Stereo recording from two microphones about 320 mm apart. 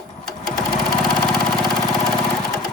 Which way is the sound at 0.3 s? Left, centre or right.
Centre.